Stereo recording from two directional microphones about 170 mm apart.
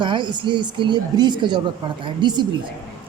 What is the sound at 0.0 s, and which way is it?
A woman's voice, 30° right (ahead or behind).